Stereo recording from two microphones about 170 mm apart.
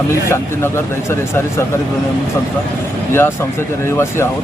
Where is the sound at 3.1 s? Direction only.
15° left (ahead or behind).